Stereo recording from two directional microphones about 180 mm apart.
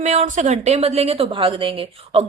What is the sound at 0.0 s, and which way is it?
A woman's voice, 40° right (ahead or behind).